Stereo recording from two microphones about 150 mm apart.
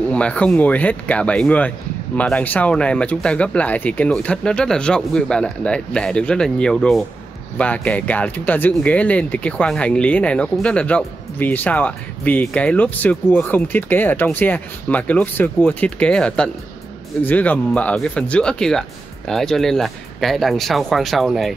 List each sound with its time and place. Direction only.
0.1 s speech: 10° left (ahead or behind)